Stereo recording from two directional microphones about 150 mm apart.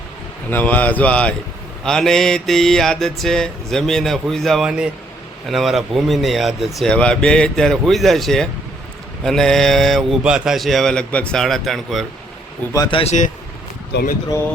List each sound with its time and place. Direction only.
0.5 s speech: 10° left (ahead or behind)
1.8 s mantra: 5° left (ahead or behind)
12.9 s a man's voice: 40° left (ahead or behind)